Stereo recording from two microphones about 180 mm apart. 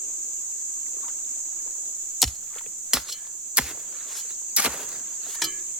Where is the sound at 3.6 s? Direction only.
5° right (ahead or behind).